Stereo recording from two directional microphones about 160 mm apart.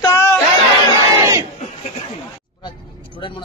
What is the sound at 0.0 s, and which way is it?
Chatter, 15° left (ahead or behind).